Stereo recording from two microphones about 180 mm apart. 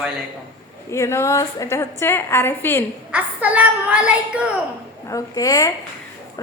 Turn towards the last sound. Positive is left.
turn(degrees=20)  # may be behind; listen again after turning